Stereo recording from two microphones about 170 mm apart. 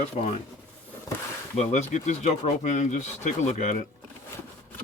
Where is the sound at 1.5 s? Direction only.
45° left (ahead or behind).